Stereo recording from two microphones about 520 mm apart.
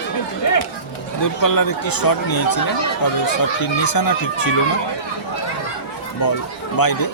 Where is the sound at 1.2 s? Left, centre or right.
Left.